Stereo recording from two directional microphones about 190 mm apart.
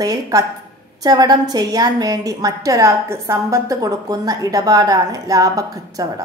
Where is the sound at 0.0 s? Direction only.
20° right (ahead or behind).